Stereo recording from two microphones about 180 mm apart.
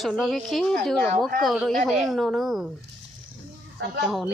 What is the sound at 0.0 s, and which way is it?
A woman's voice, centre (ahead or behind).